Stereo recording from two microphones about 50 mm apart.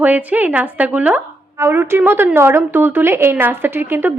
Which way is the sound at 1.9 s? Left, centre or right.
Right.